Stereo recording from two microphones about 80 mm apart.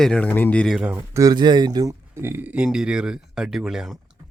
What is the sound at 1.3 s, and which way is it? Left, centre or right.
Speech, right.